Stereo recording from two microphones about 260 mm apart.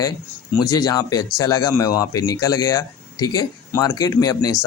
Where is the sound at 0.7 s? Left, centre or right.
Centre.